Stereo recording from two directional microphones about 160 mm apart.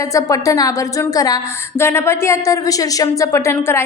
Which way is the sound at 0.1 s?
20° left (ahead or behind).